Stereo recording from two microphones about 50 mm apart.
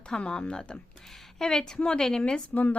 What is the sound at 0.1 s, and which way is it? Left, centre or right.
A woman's voice, centre.